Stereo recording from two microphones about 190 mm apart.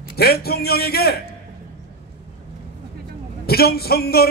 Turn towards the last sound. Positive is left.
turn(degrees=55)  # may be behind; listen again after turning